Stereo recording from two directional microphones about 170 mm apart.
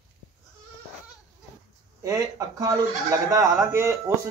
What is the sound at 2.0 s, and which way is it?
A man's voice, 20° right (ahead or behind).